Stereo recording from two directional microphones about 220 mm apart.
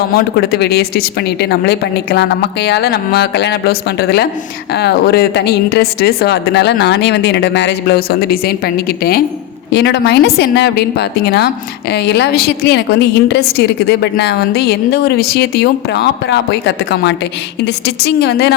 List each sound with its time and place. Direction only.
0.1 s a woman's voice: 45° left (ahead or behind)